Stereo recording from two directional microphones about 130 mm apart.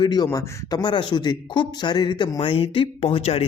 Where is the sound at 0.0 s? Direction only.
30° left (ahead or behind).